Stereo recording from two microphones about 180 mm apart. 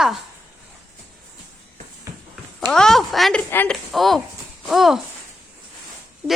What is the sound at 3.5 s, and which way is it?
Speech, 10° left (ahead or behind).